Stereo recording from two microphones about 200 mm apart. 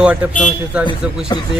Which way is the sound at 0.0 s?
5° right (ahead or behind).